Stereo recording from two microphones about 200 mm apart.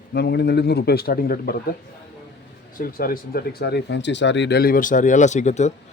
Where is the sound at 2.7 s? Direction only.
45° left (ahead or behind).